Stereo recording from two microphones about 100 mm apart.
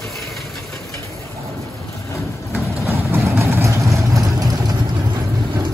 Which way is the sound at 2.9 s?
25° right (ahead or behind).